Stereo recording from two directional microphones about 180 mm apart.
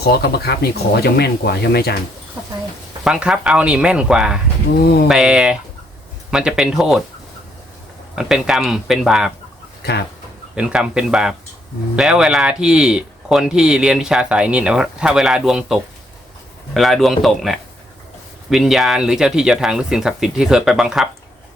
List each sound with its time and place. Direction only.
0.0 s speech: 60° left (ahead or behind)
3.0 s speech: 5° right (ahead or behind)
4.8 s speech: 60° left (ahead or behind)
5.0 s speech: 5° right (ahead or behind)
8.1 s speech: centre (ahead or behind)
10.5 s speech: 5° right (ahead or behind)